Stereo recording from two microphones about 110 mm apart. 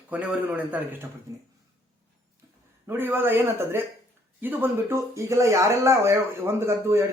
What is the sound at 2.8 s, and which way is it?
Speech, 20° right (ahead or behind).